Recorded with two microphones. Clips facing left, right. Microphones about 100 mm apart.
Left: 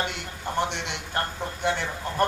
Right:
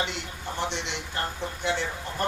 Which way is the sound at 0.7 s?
55° left (ahead or behind).